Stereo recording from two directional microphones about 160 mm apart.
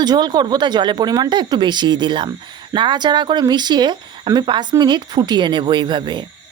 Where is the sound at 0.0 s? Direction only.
25° right (ahead or behind).